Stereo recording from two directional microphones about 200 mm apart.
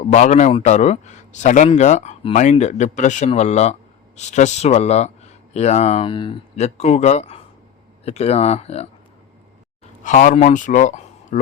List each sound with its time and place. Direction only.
0.1 s a man's voice: 35° left (ahead or behind)
10.0 s a man's voice: 40° left (ahead or behind)